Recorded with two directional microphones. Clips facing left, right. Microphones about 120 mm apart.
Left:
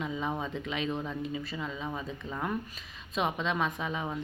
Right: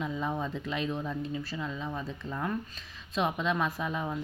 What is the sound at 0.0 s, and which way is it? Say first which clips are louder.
A woman's voice: right 1 dB; centre (ahead or behind).